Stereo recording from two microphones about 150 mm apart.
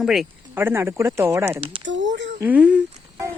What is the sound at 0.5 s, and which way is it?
Speech, 15° right (ahead or behind).